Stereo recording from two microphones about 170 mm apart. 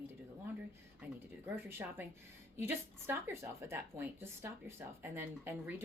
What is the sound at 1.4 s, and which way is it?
Speech, 10° right (ahead or behind).